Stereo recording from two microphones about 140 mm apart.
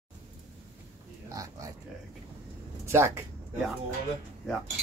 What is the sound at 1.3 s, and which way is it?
Speech, 25° right (ahead or behind).